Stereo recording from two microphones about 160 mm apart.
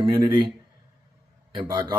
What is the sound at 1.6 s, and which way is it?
Speech, 20° right (ahead or behind).